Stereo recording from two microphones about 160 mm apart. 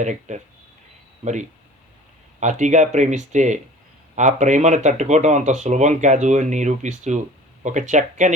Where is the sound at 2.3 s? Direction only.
50° right (ahead or behind).